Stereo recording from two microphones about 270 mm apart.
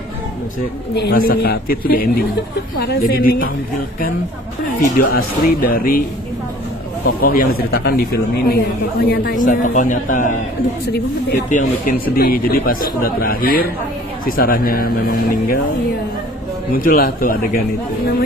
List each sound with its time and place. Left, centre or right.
0.9 s speech: left
4.7 s speech: left
7.1 s speech: left
16.7 s speech: left